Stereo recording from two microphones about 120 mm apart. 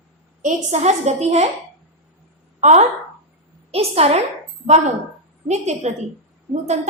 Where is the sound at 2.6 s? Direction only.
70° right (ahead or behind).